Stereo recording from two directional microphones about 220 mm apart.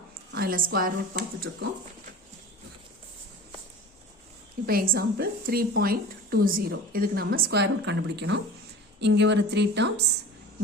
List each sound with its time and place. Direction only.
0.3 s a woman's voice: 45° right (ahead or behind)
4.6 s a woman's voice: 40° right (ahead or behind)